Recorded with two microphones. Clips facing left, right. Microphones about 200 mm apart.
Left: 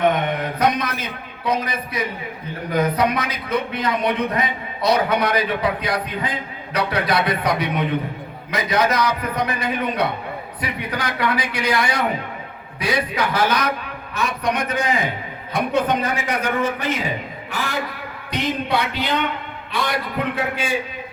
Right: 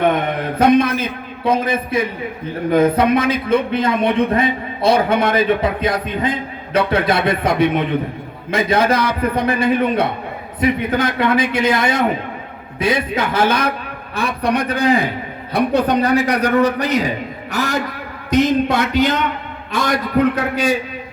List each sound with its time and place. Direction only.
0.6 s a man's voice: 30° right (ahead or behind)